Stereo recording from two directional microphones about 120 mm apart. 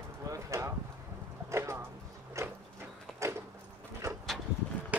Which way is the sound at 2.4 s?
25° right (ahead or behind).